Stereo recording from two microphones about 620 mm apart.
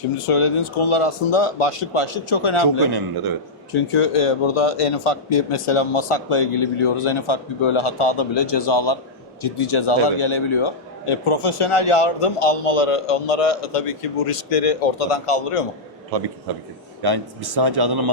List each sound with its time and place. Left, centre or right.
0.2 s a man's voice: left
17.0 s a man's voice: right